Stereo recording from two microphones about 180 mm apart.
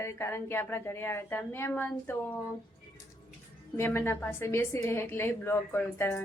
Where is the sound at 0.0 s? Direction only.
15° left (ahead or behind).